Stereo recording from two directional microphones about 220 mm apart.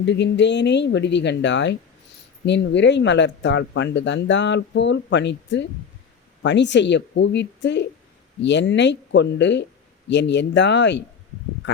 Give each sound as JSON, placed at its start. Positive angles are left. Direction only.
{"t": 0.0, "sound": "speech", "side_deg": 50}